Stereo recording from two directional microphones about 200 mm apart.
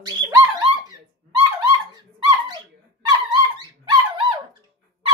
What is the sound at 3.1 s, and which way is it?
Dog, 20° right (ahead or behind).